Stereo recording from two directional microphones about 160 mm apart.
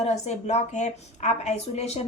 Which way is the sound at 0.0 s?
45° left (ahead or behind).